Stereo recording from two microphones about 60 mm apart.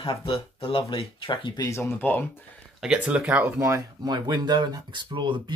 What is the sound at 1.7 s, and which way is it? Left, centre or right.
Speech, left.